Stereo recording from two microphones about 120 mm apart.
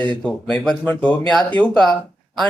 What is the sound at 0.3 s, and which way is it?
Speech, 5° left (ahead or behind).